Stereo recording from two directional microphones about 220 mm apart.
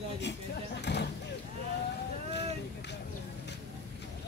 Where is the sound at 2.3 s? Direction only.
50° left (ahead or behind).